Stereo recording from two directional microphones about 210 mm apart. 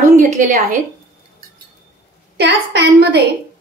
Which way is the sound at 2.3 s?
55° right (ahead or behind).